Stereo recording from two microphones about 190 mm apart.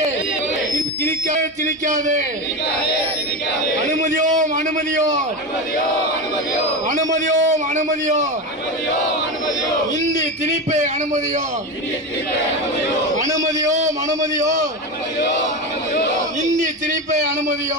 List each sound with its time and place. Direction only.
1.9 s a man's voice: 40° right (ahead or behind)
4.0 s a man's voice: 40° right (ahead or behind)
6.9 s a man's voice: 40° right (ahead or behind)
13.7 s a man's voice: 40° right (ahead or behind)
16.4 s a man's voice: 40° right (ahead or behind)